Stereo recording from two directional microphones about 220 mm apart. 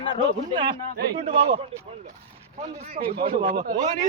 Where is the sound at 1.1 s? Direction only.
25° right (ahead or behind).